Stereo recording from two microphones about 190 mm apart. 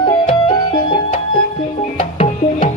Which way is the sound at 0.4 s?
25° left (ahead or behind).